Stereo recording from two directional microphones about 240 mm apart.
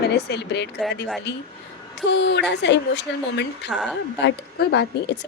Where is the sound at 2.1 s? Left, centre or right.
Left.